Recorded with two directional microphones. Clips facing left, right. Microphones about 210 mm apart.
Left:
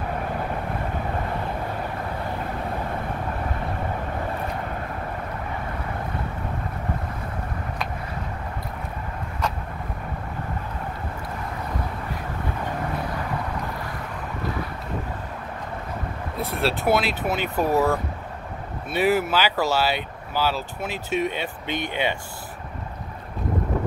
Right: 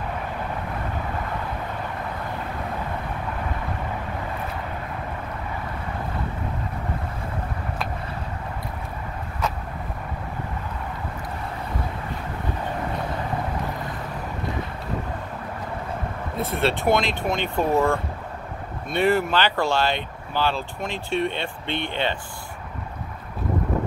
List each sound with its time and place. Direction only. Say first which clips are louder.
16.3 s speech: right 2 dB; centre (ahead or behind)